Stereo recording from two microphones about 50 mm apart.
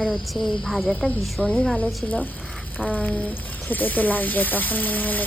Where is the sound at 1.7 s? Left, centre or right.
Left.